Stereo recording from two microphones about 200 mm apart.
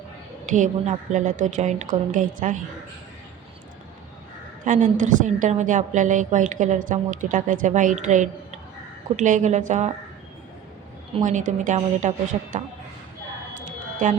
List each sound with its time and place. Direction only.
0.5 s a woman's voice: 40° right (ahead or behind)
4.6 s a woman's voice: 40° right (ahead or behind)
11.2 s a woman's voice: 40° right (ahead or behind)
13.7 s a sound: 40° right (ahead or behind)